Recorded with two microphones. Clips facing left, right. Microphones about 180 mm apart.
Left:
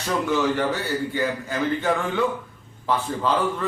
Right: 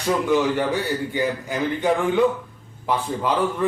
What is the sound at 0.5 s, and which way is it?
A man's voice, 15° right (ahead or behind).